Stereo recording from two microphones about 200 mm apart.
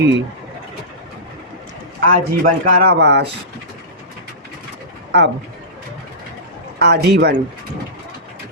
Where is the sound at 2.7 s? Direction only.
45° right (ahead or behind).